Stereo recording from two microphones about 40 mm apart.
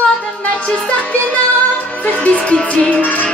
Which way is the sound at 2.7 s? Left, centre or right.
Left.